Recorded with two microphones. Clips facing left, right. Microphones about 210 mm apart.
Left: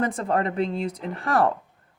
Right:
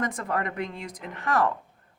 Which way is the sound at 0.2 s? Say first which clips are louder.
Left 6 dB; 30° left (ahead or behind).